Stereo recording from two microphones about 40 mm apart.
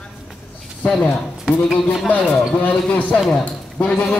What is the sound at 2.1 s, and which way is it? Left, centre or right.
A man's voice, left.